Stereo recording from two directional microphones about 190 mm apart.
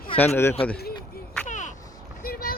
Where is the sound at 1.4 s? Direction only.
40° left (ahead or behind).